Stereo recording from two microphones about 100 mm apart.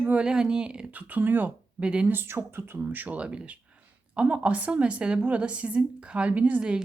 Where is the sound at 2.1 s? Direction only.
25° right (ahead or behind).